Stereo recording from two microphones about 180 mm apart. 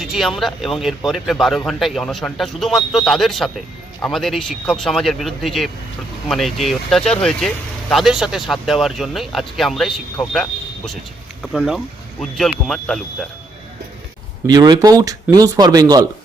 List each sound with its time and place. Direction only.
0.0 s speech: centre (ahead or behind)
14.4 s speech: 20° right (ahead or behind)